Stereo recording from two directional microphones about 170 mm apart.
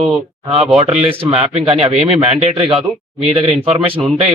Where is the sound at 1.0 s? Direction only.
35° right (ahead or behind).